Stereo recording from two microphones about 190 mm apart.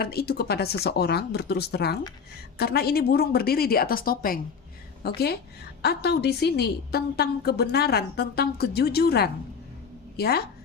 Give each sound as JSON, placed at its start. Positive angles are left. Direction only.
{"t": 0.0, "sound": "a woman's voice", "side_deg": 55}